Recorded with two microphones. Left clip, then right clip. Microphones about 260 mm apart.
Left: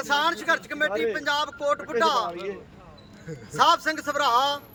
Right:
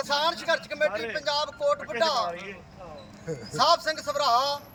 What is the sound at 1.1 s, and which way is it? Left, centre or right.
A man's voice, left.